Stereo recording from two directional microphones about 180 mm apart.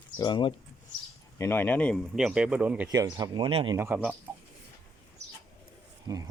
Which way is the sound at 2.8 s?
20° right (ahead or behind).